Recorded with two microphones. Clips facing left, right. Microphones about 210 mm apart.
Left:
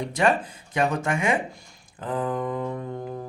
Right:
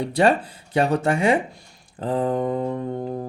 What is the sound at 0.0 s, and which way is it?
Speech, 35° right (ahead or behind).